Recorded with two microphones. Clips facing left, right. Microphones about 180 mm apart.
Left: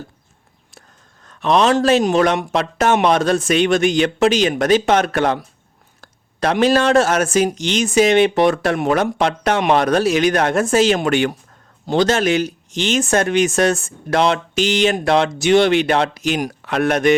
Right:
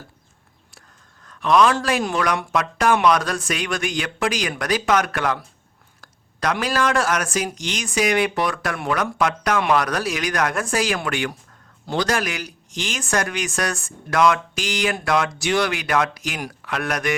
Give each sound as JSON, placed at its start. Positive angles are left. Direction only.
{"t": 1.3, "sound": "speech", "side_deg": 25}